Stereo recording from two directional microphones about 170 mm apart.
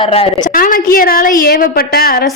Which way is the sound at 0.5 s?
55° left (ahead or behind).